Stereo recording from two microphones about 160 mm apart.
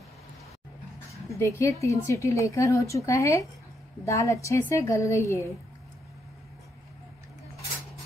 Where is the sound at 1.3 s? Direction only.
20° left (ahead or behind).